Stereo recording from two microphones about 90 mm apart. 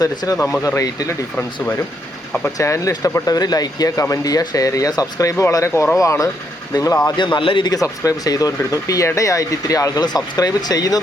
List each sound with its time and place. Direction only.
0.0 s speech: 45° left (ahead or behind)
2.6 s speech: 35° left (ahead or behind)
3.2 s speech: 45° left (ahead or behind)
7.2 s a man's voice: 65° left (ahead or behind)
7.7 s speech: 40° left (ahead or behind)